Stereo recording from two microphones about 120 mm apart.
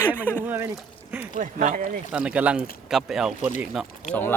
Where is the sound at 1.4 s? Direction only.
90° right.